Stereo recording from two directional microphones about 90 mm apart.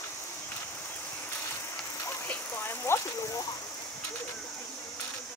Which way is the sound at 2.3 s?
25° left (ahead or behind).